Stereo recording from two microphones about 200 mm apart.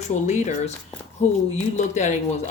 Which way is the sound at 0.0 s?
35° left (ahead or behind).